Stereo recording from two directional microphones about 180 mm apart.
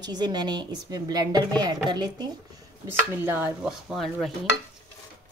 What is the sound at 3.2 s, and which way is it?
Dishes, 10° right (ahead or behind).